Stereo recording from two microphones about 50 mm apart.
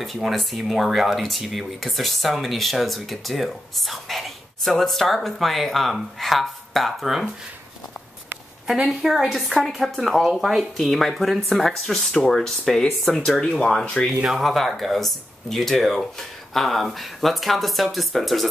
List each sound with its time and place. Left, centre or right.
0.0 s speech: centre
8.8 s speech: centre
13.4 s speech: centre
14.4 s speech: centre